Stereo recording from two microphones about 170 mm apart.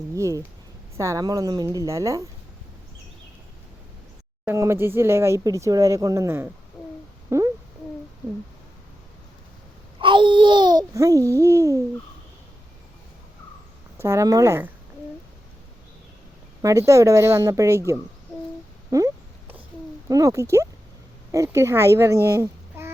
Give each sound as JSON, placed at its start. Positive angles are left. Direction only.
{"t": 0.1, "sound": "a woman's voice", "side_deg": -20}
{"t": 4.4, "sound": "speech", "side_deg": -15}
{"t": 7.3, "sound": "a sound", "side_deg": -15}
{"t": 10.0, "sound": "a woman's voice", "side_deg": -30}
{"t": 14.0, "sound": "speech", "side_deg": -20}
{"t": 16.6, "sound": "speech", "side_deg": -20}
{"t": 18.9, "sound": "a sound", "side_deg": -20}
{"t": 20.1, "sound": "a child's voice", "side_deg": -20}